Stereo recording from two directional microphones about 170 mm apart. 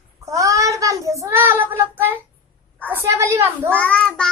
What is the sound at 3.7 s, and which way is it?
Child singing, 5° left (ahead or behind).